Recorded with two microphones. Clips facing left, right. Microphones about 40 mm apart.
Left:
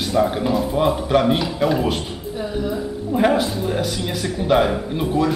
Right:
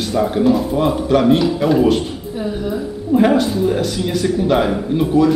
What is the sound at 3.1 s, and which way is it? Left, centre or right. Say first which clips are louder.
Speech: right 4 dB; centre.